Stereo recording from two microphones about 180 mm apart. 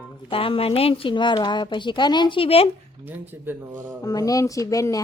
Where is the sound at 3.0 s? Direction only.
10° right (ahead or behind).